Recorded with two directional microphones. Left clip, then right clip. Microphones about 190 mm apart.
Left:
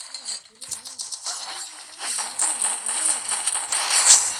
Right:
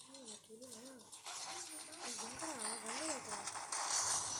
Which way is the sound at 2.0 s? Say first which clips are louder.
Left 18 dB; 45° left (ahead or behind).